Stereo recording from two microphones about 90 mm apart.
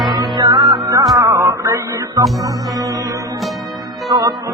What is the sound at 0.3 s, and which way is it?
Music, 60° right (ahead or behind).